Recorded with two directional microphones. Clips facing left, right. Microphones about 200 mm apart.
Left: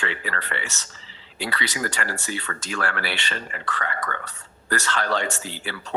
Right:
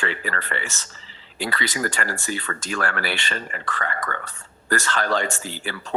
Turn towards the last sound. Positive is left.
turn(degrees=-45)  # may be behind; listen again after turning